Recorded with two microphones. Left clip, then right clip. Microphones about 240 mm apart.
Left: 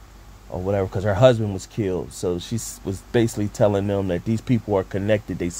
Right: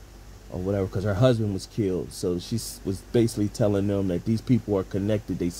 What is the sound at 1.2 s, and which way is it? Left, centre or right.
Speech, left.